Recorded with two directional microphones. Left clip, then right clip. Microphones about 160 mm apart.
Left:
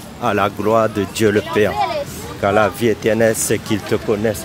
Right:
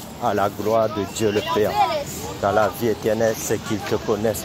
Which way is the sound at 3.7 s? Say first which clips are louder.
Left 4 dB; 25° left (ahead or behind).